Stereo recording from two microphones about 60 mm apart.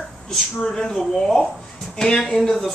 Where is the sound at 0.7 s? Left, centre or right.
Centre.